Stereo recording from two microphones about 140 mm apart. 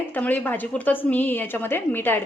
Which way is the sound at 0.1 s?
10° left (ahead or behind).